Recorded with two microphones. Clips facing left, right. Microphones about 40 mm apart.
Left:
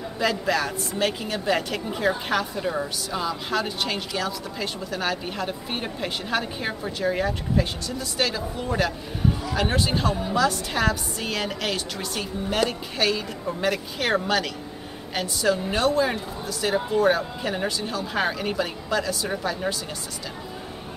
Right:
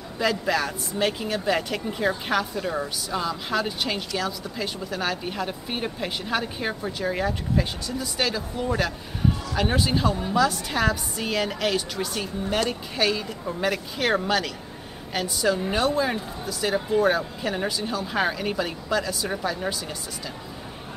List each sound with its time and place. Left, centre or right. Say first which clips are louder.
0.2 s a woman's voice: even; centre